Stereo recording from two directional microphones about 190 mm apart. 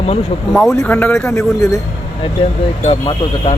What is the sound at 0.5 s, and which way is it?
Speech, centre (ahead or behind).